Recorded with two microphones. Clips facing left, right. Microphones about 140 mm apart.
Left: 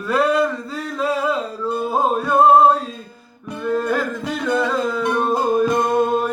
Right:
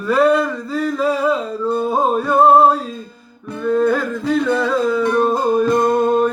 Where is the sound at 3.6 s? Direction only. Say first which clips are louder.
Right 4 dB; 5° left (ahead or behind).